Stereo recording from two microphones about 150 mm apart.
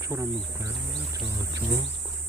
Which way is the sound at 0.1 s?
20° right (ahead or behind).